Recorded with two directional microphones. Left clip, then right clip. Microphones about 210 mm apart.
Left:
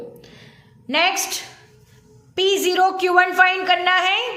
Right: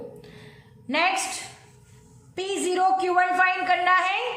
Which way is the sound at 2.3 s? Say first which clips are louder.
Left 8 dB; 35° left (ahead or behind).